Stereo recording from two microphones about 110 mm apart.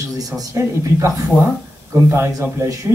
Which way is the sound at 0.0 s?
30° right (ahead or behind).